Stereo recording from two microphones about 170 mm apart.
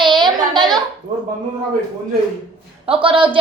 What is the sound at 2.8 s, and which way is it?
Speech, 30° right (ahead or behind).